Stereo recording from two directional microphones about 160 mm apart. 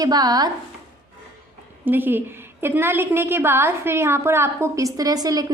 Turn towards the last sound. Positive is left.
turn(degrees=-25)  # may be behind; listen again after turning